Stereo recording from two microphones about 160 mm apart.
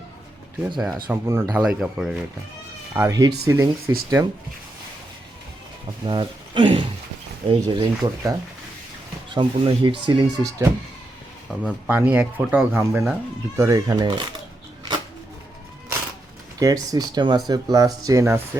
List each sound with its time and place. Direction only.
0.6 s speech: centre (ahead or behind)
1.0 s speech: 15° right (ahead or behind)
1.6 s speech: 5° right (ahead or behind)
2.9 s speech: 20° right (ahead or behind)
6.1 s speech: 30° right (ahead or behind)
11.5 s speech: 10° right (ahead or behind); by 14.3 s 25° right (ahead or behind)
16.6 s speech: 20° right (ahead or behind)